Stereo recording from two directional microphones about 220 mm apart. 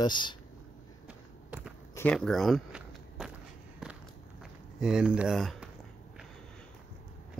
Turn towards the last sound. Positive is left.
turn(degrees=0)  # may be behind; listen again after turning